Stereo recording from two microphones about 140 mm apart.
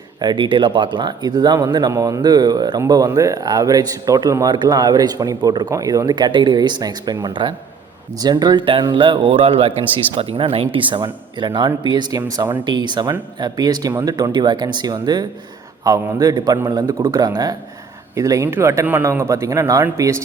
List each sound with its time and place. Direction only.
0.2 s speech: 30° right (ahead or behind)